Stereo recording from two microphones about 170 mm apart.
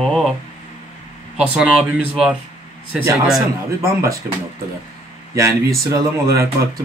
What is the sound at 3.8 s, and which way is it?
Speech, 15° right (ahead or behind).